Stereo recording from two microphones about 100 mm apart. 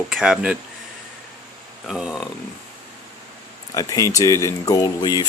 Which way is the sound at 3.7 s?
35° left (ahead or behind).